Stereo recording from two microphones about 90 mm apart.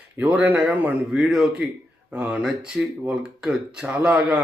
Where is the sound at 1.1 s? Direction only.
5° right (ahead or behind).